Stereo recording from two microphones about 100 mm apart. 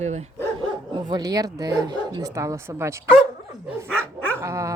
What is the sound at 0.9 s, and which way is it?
Speech, 45° right (ahead or behind).